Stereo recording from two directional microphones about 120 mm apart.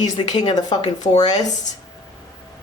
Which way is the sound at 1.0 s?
75° left (ahead or behind).